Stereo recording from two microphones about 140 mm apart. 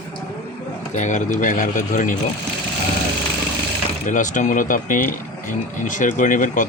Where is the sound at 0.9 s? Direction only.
60° left (ahead or behind).